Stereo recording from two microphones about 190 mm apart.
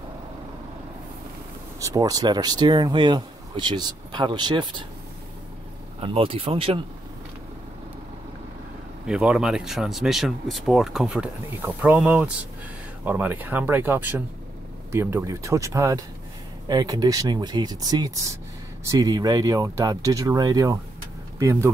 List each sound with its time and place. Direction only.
1.8 s speech: 20° right (ahead or behind)
5.9 s speech: 30° right (ahead or behind)
9.0 s speech: 5° right (ahead or behind)